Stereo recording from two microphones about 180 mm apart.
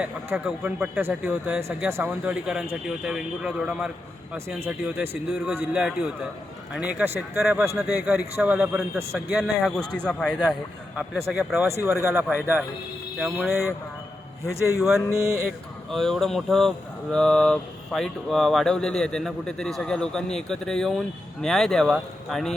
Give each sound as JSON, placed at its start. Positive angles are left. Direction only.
{"t": 0.0, "sound": "speech", "side_deg": -5}
{"t": 13.5, "sound": "a man's voice", "side_deg": 15}
{"t": 14.8, "sound": "speech", "side_deg": -5}